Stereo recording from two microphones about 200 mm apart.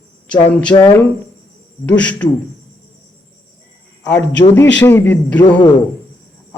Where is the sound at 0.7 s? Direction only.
20° left (ahead or behind).